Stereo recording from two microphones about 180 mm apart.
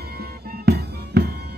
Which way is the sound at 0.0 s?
60° right (ahead or behind).